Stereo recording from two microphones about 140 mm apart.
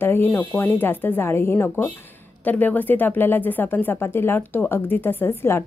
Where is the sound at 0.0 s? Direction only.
15° left (ahead or behind).